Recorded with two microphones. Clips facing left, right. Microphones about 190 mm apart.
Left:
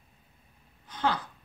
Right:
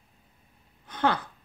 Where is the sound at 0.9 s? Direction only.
60° right (ahead or behind).